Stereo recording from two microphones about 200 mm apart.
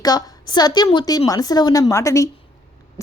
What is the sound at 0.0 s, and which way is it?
A woman's voice, 20° left (ahead or behind).